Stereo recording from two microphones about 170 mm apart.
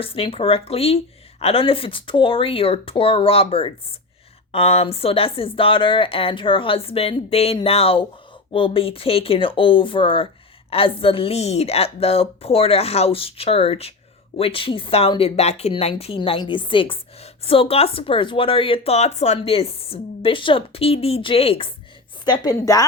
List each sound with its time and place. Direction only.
0.0 s speech: 35° left (ahead or behind)
22.2 s a woman's voice: 25° left (ahead or behind)